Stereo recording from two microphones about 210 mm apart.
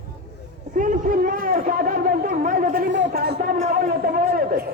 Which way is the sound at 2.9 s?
50° right (ahead or behind).